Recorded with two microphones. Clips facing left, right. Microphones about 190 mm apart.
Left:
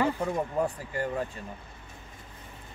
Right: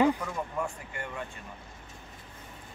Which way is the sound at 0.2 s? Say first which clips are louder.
Left 6 dB; 35° left (ahead or behind).